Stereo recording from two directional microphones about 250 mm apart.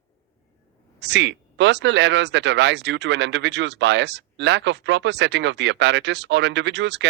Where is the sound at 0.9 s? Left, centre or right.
Right.